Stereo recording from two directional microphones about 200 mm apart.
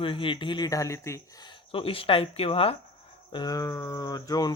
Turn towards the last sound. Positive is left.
turn(degrees=20)  # may be behind; listen again after turning